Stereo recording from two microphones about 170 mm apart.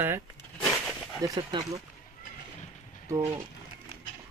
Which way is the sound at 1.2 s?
25° right (ahead or behind).